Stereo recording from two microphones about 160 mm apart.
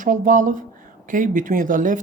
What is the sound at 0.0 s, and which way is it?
Speech, 55° right (ahead or behind).